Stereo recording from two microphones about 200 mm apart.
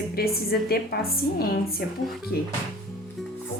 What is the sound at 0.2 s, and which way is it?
Speech, 50° left (ahead or behind).